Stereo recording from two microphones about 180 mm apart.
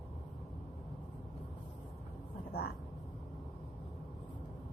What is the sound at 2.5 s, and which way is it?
Vehicle, 60° left (ahead or behind).